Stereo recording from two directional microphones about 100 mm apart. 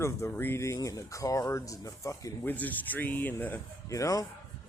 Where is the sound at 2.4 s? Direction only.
15° left (ahead or behind).